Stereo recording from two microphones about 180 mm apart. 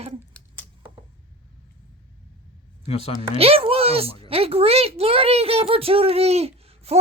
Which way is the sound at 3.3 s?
30° right (ahead or behind).